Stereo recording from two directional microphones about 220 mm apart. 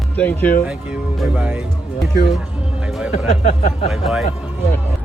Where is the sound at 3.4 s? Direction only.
30° left (ahead or behind).